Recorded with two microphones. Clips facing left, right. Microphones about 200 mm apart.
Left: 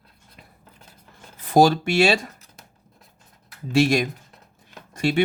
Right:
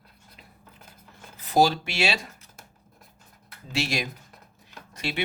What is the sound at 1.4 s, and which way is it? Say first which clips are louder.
Speech: left 5 dB; 50° left (ahead or behind).